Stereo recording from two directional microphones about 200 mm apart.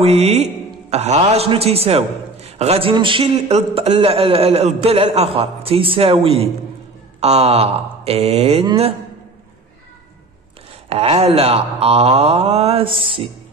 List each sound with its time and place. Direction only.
0.0 s a man's voice: 30° right (ahead or behind)
10.9 s a man's voice: 30° right (ahead or behind)